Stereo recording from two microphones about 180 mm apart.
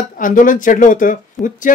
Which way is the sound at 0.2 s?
45° left (ahead or behind).